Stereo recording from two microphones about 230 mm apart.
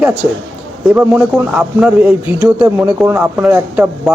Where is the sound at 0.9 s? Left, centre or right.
Centre.